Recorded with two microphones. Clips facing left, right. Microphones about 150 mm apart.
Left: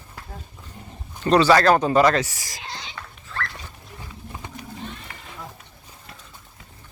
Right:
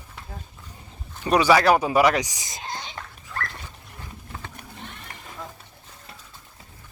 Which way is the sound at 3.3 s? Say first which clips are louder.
Left 1 dB; 15° right (ahead or behind).